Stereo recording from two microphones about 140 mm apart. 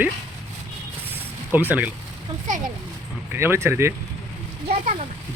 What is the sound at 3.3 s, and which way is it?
Speech, 15° right (ahead or behind).